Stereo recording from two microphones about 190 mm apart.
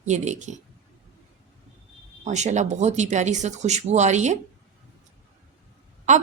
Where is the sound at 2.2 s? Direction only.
40° right (ahead or behind).